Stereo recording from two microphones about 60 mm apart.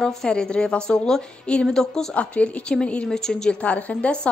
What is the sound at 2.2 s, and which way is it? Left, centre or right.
A woman's voice, left.